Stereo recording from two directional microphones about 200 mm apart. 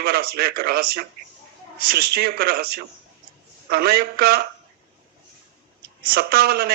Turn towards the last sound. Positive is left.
turn(degrees=-50)  # may be behind; listen again after turning